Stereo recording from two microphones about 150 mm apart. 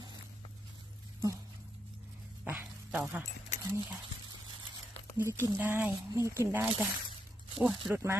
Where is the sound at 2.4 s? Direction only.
10° right (ahead or behind).